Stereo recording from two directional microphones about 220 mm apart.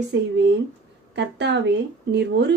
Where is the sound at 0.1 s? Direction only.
55° right (ahead or behind).